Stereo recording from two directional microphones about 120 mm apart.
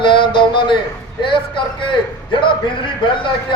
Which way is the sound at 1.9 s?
45° left (ahead or behind).